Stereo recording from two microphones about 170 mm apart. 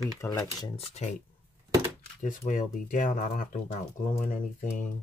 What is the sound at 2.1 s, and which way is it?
Speech, 50° left (ahead or behind).